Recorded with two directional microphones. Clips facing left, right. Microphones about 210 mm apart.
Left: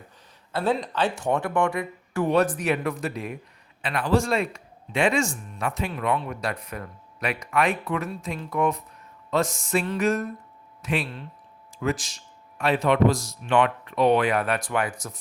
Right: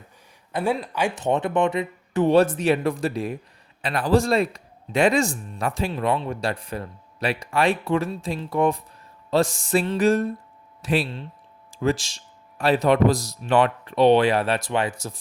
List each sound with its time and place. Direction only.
0.5 s a man's voice: 10° right (ahead or behind)